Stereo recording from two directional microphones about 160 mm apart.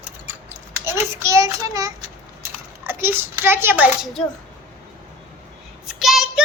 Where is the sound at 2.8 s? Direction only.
15° right (ahead or behind).